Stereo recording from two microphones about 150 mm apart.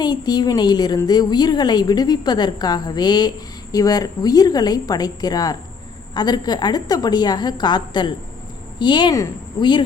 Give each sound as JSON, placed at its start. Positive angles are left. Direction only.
{"t": 0.0, "sound": "a woman's voice", "side_deg": 25}